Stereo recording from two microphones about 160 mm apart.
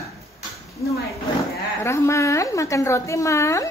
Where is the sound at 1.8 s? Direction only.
15° left (ahead or behind).